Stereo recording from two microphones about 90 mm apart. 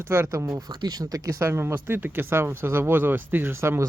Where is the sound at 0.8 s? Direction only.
45° right (ahead or behind); by 3.9 s 30° right (ahead or behind).